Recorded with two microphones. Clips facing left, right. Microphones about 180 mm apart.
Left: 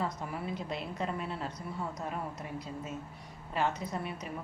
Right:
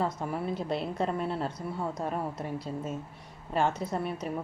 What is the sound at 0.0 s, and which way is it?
A woman's voice, 30° right (ahead or behind).